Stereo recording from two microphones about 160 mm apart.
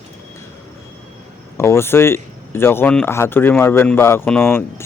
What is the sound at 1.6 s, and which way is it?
Speech, 15° left (ahead or behind).